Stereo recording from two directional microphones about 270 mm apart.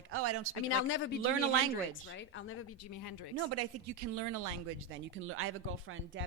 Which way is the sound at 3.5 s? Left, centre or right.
Right.